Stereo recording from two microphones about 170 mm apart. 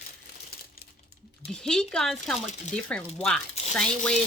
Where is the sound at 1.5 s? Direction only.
5° left (ahead or behind).